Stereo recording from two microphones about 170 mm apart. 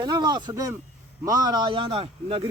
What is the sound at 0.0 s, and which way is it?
A man's voice, 25° right (ahead or behind).